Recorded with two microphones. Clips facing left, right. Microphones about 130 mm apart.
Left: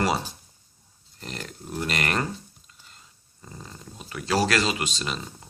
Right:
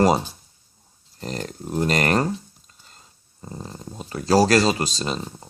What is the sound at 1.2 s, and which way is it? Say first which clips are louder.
Speech: right 7 dB; 35° right (ahead or behind).